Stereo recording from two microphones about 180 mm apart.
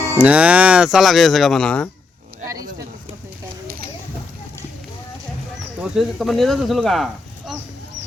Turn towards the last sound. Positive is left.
turn(degrees=0)  # may be behind; listen again after turning